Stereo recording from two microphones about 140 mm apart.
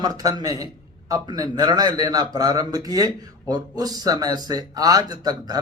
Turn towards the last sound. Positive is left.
turn(degrees=-30)  # may be behind; listen again after turning